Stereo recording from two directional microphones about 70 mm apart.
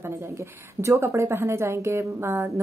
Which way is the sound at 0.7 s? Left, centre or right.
Right.